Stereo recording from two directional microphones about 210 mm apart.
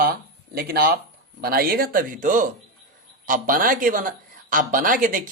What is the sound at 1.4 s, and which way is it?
Speech, 45° right (ahead or behind).